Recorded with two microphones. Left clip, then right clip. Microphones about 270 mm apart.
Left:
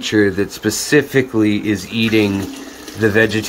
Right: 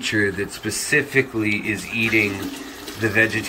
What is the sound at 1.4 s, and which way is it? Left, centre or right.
Speech, left.